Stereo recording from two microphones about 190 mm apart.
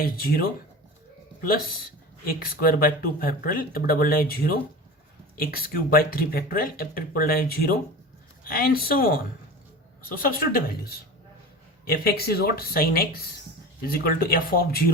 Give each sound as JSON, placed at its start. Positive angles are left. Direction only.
{"t": 0.0, "sound": "speech", "side_deg": 50}
{"t": 2.2, "sound": "speech", "side_deg": 50}
{"t": 10.2, "sound": "speech", "side_deg": 50}